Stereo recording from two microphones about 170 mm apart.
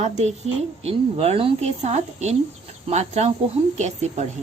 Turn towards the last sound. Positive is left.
turn(degrees=-40)  # may be behind; listen again after turning